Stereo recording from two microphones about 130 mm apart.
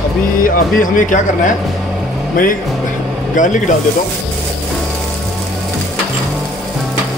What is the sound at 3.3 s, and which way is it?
Speech, 75° left (ahead or behind).